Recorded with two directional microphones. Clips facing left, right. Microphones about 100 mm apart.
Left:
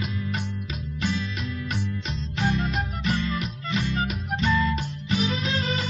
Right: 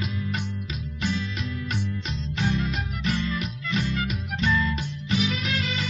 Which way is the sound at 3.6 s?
35° left (ahead or behind).